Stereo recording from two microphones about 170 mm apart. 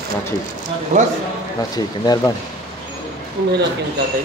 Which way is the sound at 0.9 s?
45° right (ahead or behind).